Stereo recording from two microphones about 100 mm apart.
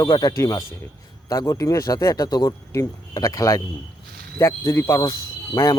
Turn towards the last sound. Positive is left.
turn(degrees=35)  # may be behind; listen again after turning